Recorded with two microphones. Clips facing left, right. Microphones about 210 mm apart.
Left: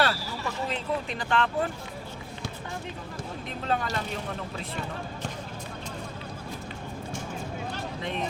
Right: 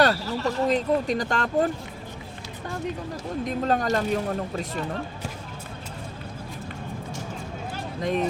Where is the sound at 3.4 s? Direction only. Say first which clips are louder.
Right 6 dB; 40° right (ahead or behind).